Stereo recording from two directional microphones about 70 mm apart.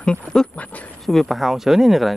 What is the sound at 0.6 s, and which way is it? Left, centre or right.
Speech, left.